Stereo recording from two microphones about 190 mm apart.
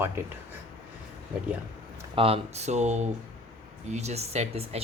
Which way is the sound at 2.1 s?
30° right (ahead or behind).